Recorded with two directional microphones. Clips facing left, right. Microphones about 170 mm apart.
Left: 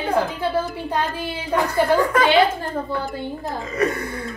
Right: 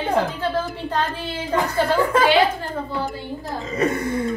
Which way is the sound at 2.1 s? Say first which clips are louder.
Right 3 dB; 25° right (ahead or behind).